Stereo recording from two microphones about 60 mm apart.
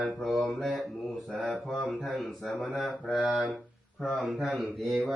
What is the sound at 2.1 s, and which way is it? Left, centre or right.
Mantra, centre.